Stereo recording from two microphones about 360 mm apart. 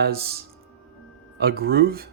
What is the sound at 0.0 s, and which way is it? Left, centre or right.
Speech, right.